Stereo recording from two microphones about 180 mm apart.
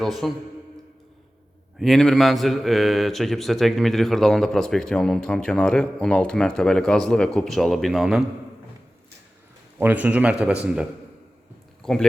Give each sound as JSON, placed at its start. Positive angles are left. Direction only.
{"t": 0.0, "sound": "a man's voice", "side_deg": 0}
{"t": 1.8, "sound": "a man's voice", "side_deg": 0}
{"t": 9.7, "sound": "speech", "side_deg": -10}
{"t": 11.8, "sound": "speech", "side_deg": 0}